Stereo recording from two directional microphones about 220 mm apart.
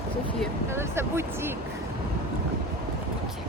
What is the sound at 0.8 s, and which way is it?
Speech, 10° right (ahead or behind).